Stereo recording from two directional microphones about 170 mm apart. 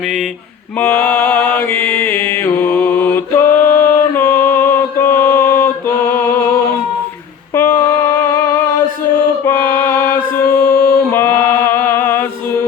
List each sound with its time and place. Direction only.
0.8 s mantra: 10° left (ahead or behind)
7.5 s a sound: 15° left (ahead or behind)
9.4 s mantra: 10° left (ahead or behind)